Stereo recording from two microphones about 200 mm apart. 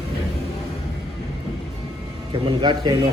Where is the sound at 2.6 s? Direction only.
20° right (ahead or behind).